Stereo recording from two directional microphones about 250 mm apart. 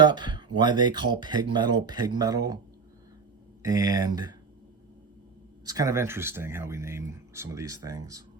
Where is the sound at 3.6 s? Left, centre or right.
Centre.